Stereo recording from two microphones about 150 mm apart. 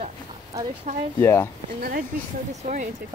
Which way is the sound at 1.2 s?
15° left (ahead or behind).